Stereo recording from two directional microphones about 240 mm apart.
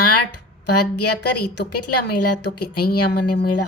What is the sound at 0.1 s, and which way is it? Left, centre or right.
Speech, left.